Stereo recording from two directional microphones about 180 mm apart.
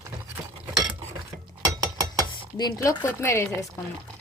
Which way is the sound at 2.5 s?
20° left (ahead or behind).